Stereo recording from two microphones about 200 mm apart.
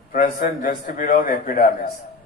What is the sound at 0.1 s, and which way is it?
A man's voice, 45° left (ahead or behind).